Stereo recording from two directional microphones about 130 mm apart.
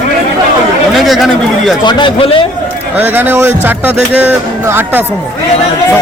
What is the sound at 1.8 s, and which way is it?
Speech, 40° left (ahead or behind).